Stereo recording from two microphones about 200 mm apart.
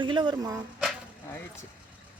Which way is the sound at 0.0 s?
25° right (ahead or behind).